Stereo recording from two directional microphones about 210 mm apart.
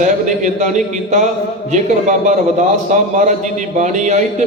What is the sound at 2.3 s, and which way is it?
A man's voice, 35° right (ahead or behind).